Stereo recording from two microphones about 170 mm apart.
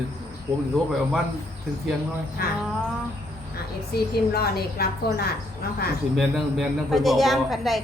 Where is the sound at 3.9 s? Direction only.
65° left (ahead or behind).